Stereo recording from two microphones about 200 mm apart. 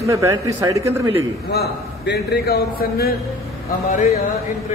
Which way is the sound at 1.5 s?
55° left (ahead or behind).